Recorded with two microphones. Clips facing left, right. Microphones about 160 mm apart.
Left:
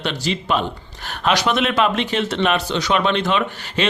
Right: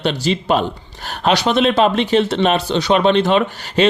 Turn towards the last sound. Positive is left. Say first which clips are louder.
# right 6 dB
turn(degrees=-35)  # may be behind; listen again after turning